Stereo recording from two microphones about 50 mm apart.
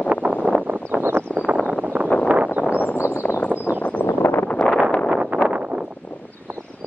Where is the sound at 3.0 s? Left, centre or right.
Left.